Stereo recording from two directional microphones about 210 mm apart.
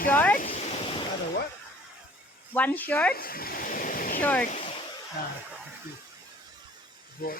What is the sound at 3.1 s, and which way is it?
Splash, 45° left (ahead or behind).